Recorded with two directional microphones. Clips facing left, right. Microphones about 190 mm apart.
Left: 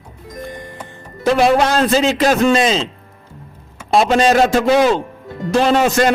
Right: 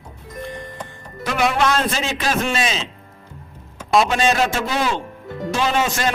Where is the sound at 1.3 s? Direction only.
30° left (ahead or behind).